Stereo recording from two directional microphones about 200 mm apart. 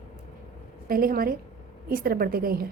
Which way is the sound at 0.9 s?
45° right (ahead or behind).